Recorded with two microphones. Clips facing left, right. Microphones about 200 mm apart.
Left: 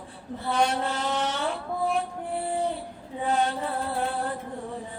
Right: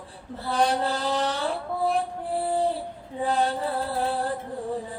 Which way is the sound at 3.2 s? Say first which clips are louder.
Right 1 dB; 35° right (ahead or behind).